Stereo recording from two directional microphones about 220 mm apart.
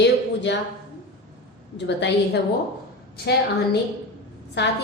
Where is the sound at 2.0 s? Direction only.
50° left (ahead or behind).